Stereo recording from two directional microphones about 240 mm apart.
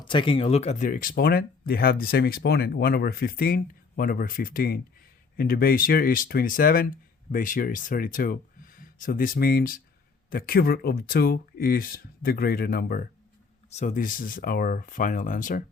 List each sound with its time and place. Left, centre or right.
0.0 s speech: centre